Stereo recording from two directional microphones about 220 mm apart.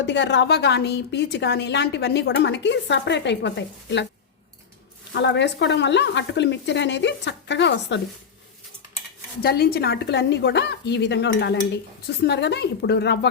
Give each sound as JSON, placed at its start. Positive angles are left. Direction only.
{"t": 0.0, "sound": "a woman's voice", "side_deg": 55}
{"t": 5.1, "sound": "a woman's voice", "side_deg": 50}
{"t": 9.4, "sound": "a woman's voice", "side_deg": 45}